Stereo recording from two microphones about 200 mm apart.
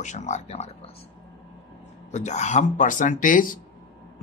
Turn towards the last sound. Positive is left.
turn(degrees=40)  # may be behind; listen again after turning